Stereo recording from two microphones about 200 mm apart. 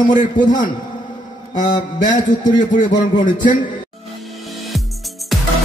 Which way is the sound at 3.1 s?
20° left (ahead or behind).